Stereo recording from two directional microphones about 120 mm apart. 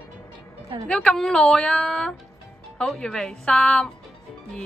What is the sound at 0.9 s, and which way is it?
A woman's voice, 5° left (ahead or behind).